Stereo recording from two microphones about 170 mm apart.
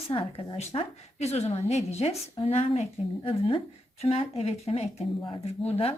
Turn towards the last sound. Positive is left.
turn(degrees=35)  # may be behind; listen again after turning